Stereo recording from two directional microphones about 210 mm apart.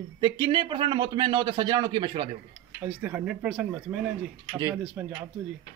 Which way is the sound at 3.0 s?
5° right (ahead or behind).